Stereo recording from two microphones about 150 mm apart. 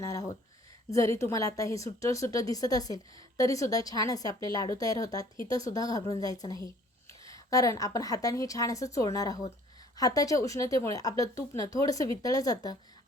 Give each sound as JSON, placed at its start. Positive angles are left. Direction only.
{"t": 0.0, "sound": "a woman's voice", "side_deg": 25}